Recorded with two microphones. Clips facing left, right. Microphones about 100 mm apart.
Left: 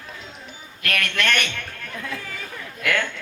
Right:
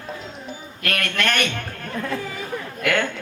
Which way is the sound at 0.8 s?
35° right (ahead or behind).